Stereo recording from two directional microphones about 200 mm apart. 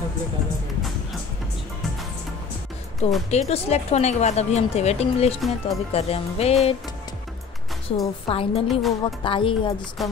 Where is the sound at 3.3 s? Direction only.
30° left (ahead or behind).